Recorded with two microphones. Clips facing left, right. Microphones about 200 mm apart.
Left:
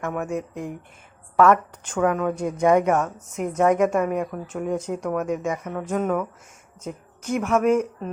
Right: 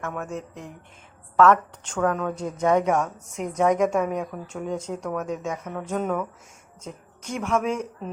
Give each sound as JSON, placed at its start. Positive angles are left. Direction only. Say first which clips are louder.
{"t": 0.0, "sound": "a woman's voice", "louder": "left 5 dB", "side_deg": 10}